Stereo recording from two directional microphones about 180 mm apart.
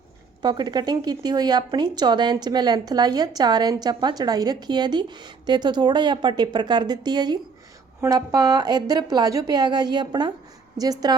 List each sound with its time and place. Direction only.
0.4 s speech: 25° right (ahead or behind)